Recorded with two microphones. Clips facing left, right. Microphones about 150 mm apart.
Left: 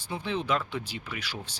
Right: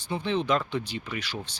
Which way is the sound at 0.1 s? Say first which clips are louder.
Right 3 dB; 10° left (ahead or behind).